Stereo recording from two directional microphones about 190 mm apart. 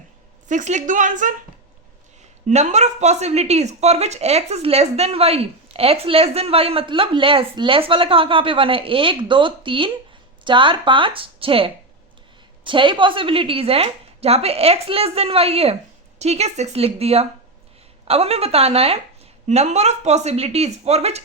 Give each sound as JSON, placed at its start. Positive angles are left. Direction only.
{"t": 0.4, "sound": "speech", "side_deg": -40}
{"t": 2.5, "sound": "speech", "side_deg": -35}